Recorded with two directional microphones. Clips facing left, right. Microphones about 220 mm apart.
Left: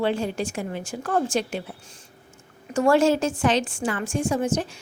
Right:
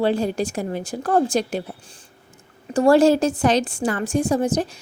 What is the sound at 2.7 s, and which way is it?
A woman's voice, 35° right (ahead or behind).